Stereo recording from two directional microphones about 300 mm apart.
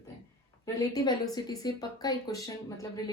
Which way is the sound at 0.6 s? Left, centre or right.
Centre.